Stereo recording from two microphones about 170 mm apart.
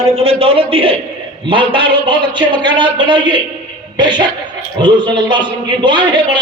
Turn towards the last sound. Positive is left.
turn(degrees=-25)  # may be behind; listen again after turning